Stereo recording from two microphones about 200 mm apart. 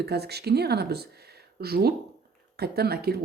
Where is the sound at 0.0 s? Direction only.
55° right (ahead or behind).